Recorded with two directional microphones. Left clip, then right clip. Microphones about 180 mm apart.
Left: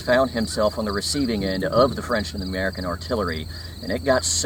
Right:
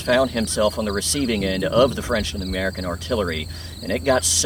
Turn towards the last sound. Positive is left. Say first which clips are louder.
# right 1 dB
turn(degrees=-15)  # may be behind; listen again after turning